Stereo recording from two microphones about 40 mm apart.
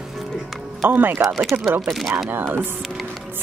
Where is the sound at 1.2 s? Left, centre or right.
Centre.